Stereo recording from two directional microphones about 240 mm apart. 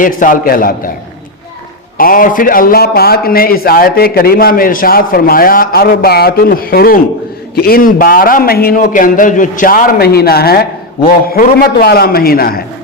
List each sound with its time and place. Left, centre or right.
0.0 s a man's voice: left
2.0 s a man's voice: left